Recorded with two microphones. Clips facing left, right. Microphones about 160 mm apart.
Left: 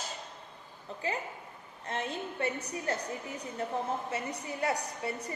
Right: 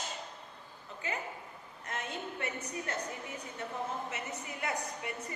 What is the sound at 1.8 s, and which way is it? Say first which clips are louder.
A woman's voice: left 4 dB; 30° left (ahead or behind).